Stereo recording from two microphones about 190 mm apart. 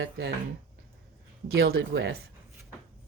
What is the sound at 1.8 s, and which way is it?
Speech, 80° right.